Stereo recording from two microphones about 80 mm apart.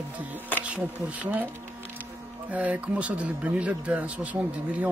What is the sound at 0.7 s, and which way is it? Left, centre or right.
Speech, centre.